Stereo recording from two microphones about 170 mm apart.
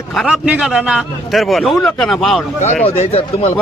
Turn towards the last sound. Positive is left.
turn(degrees=35)  # may be behind; listen again after turning